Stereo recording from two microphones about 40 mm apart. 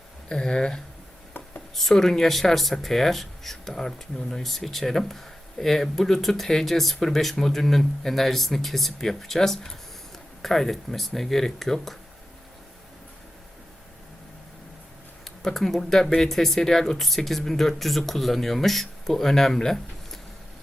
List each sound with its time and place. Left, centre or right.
0.3 s speech: centre
1.7 s speech: centre
15.5 s speech: centre